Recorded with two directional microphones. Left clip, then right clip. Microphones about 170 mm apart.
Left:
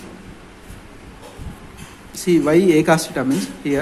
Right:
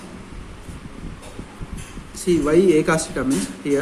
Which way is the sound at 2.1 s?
30° left (ahead or behind).